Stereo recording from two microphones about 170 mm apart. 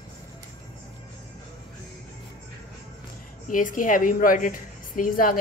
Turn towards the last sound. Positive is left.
turn(degrees=55)  # may be behind; listen again after turning